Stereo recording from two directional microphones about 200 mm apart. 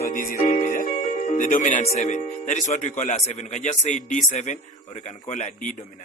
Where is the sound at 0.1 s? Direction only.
45° left (ahead or behind).